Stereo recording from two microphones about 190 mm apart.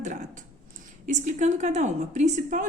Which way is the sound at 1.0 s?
40° right (ahead or behind).